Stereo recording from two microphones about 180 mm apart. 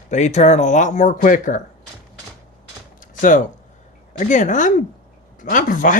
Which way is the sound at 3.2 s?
45° left (ahead or behind).